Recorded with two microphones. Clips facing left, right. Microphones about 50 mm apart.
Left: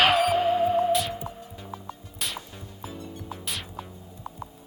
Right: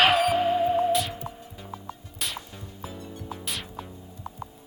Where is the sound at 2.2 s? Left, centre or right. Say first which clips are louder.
Even; centre.